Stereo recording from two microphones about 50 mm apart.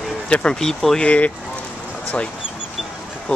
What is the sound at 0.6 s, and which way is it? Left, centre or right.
Speech, centre.